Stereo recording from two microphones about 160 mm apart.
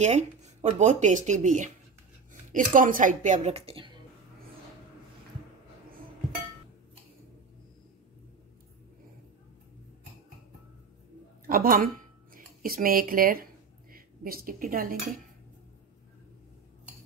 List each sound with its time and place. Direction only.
0.0 s speech: 45° right (ahead or behind)
11.4 s a woman's voice: 60° right (ahead or behind)